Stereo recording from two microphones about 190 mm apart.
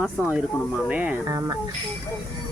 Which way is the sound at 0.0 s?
5° right (ahead or behind).